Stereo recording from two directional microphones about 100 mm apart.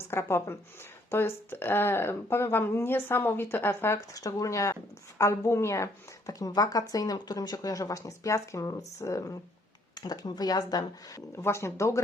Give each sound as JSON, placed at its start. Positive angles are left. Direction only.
{"t": 0.0, "sound": "speech", "side_deg": 25}
{"t": 9.9, "sound": "speech", "side_deg": 45}